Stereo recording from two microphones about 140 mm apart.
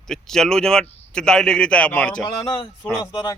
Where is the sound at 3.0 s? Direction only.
30° left (ahead or behind).